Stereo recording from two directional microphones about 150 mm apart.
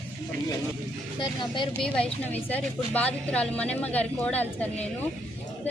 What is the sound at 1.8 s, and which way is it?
A woman's voice, 10° left (ahead or behind).